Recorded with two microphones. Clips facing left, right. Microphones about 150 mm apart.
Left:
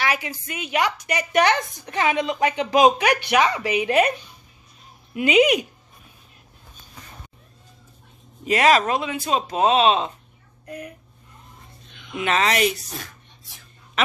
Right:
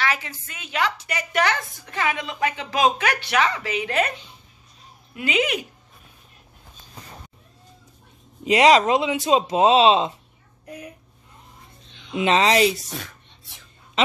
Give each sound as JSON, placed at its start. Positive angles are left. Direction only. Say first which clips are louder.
{"t": 0.0, "sound": "a woman's voice", "louder": "left 1 dB", "side_deg": 15}
{"t": 5.1, "sound": "a woman's voice", "louder": "left 7 dB", "side_deg": 15}
{"t": 8.5, "sound": "speech", "louder": "right 2 dB", "side_deg": -20}
{"t": 11.9, "sound": "a woman's voice", "louder": "right 3 dB", "side_deg": -30}